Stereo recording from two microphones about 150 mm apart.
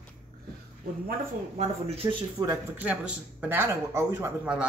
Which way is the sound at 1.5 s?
40° right (ahead or behind).